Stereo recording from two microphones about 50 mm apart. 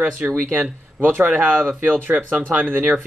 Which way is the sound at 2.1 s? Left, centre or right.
Right.